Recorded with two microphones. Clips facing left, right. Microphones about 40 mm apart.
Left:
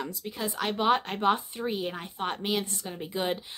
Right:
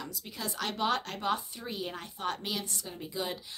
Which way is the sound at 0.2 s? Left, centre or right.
Centre.